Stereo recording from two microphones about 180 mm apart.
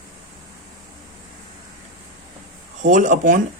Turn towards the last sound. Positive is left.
turn(degrees=-45)  # may be behind; listen again after turning